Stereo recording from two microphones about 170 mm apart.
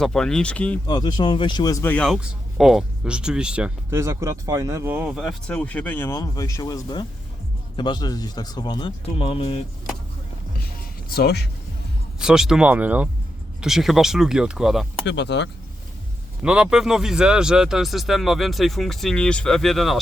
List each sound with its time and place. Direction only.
0.0 s speech: 5° left (ahead or behind)
0.9 s speech: 25° left (ahead or behind)
11.1 s speech: 70° left (ahead or behind)
12.2 s speech: 5° right (ahead or behind)
15.0 s speech: 90° left
16.4 s speech: 5° right (ahead or behind)